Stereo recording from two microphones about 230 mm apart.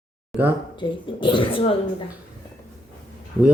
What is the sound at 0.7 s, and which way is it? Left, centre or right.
Speech, centre.